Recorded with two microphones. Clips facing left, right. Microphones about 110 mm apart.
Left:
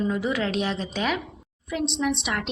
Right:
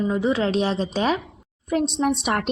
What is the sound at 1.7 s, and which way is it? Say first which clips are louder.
Speech: right 4 dB; 45° right (ahead or behind).